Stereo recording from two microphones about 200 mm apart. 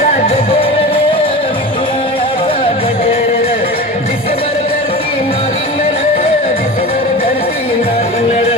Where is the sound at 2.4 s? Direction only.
25° left (ahead or behind).